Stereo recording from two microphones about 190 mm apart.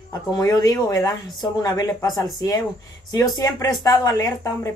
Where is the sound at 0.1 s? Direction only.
20° left (ahead or behind).